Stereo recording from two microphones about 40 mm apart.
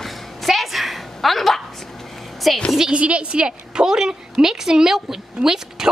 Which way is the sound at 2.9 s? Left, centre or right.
Right.